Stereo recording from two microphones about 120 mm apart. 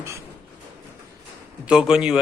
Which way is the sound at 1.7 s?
5° right (ahead or behind).